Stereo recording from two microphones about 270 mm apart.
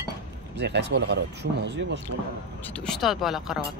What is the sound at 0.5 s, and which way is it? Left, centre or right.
Speech, right.